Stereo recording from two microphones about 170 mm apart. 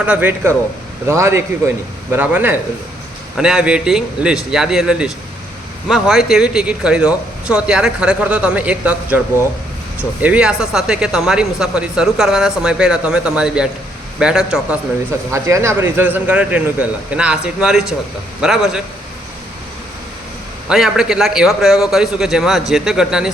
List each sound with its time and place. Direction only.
0.0 s speech: 10° right (ahead or behind)
15.3 s speech: 15° right (ahead or behind)
20.7 s speech: 5° right (ahead or behind)